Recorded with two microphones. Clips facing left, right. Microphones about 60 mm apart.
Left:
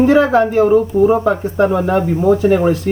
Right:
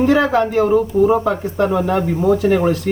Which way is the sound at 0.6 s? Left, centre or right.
Centre.